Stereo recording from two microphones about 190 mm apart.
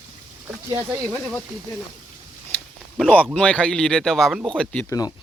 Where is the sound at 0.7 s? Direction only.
15° right (ahead or behind).